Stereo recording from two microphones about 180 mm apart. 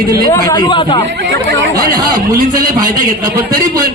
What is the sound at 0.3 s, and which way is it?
Speech, 20° left (ahead or behind).